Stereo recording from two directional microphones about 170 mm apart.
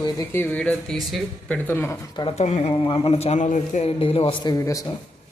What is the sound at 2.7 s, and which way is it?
A man's voice, 25° left (ahead or behind).